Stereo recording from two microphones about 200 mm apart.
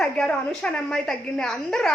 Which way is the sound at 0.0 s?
5° left (ahead or behind).